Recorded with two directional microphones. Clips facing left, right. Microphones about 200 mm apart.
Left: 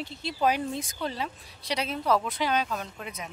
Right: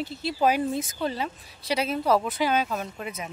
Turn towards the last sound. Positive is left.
turn(degrees=-5)  # may be behind; listen again after turning